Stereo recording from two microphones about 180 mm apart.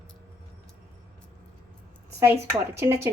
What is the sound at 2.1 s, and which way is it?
Speech, 15° right (ahead or behind).